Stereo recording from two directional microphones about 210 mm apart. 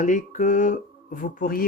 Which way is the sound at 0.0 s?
35° left (ahead or behind).